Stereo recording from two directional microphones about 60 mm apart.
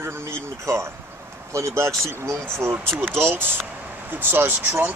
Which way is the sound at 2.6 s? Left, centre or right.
Right.